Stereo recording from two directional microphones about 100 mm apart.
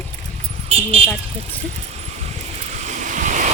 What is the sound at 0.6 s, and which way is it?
Speech, 75° right (ahead or behind).